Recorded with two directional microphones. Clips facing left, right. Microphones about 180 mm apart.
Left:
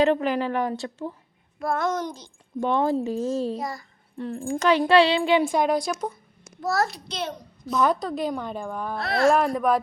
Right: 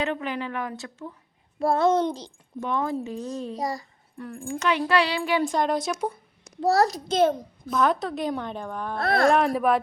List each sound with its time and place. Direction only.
0.0 s a woman's voice: 40° left (ahead or behind)
1.5 s a child's voice: 30° right (ahead or behind)
2.6 s a woman's voice: 30° left (ahead or behind)
3.6 s a child's voice: 35° right (ahead or behind)
4.2 s speech: 25° left (ahead or behind)
4.4 s speech: 35° left (ahead or behind)
5.4 s a woman's voice: 5° left (ahead or behind)
6.6 s a child's voice: 35° right (ahead or behind); by 7.7 s 50° right (ahead or behind)
7.8 s a woman's voice: centre (ahead or behind)
9.0 s speech: 50° right (ahead or behind)
9.2 s a woman's voice: centre (ahead or behind)